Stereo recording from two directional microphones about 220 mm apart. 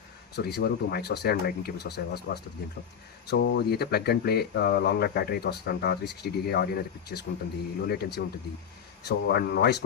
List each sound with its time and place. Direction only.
0.3 s speech: 50° left (ahead or behind)